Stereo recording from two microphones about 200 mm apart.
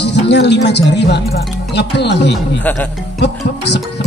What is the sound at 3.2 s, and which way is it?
Speech, 60° left (ahead or behind).